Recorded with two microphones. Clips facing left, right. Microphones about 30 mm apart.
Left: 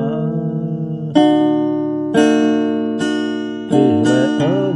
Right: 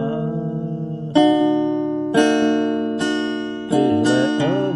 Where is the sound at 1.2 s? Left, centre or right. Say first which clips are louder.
Left 3 dB; centre.